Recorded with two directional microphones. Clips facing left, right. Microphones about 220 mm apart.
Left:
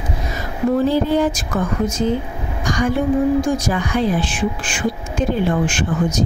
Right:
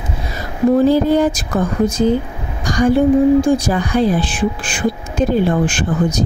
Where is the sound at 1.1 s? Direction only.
40° right (ahead or behind).